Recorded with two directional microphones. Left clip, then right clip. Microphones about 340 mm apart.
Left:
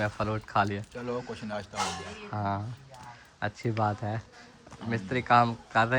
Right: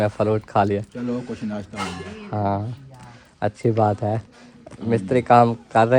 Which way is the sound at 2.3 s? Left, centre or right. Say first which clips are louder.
Right 9 dB; centre.